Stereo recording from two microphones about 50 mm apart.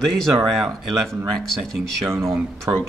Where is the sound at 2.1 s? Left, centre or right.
Right.